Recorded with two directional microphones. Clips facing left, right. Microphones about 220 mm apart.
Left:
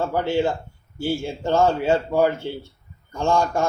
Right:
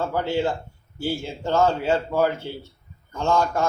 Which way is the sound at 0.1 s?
15° left (ahead or behind).